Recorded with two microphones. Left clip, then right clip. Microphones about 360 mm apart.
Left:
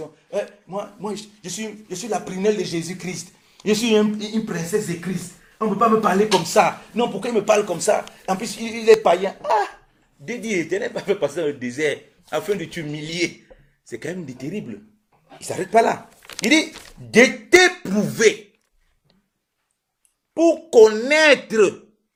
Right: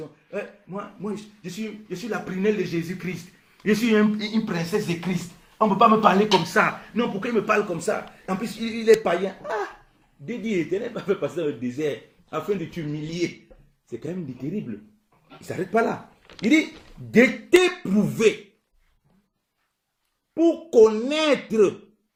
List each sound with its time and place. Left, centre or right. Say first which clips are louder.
0.3 s speech: left 7 dB; left
3.6 s speech: left 3 dB; centre
6.5 s speech: left 4 dB; centre
7.4 s speech: left 7 dB; left
15.4 s speech: left 6 dB; left
20.3 s speech: left 4 dB; left